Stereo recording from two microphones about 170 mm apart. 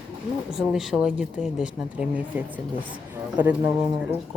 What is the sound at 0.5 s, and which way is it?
A woman's voice, centre (ahead or behind).